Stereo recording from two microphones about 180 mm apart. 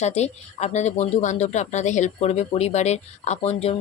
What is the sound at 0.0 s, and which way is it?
Speech, 40° left (ahead or behind).